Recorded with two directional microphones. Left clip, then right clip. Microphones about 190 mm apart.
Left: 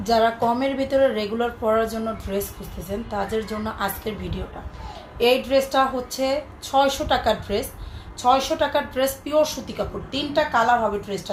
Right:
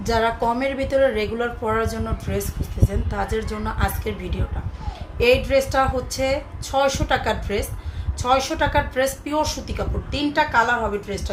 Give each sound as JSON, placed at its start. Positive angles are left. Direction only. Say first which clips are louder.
{"t": 0.0, "sound": "a woman's voice", "louder": "left 1 dB", "side_deg": -15}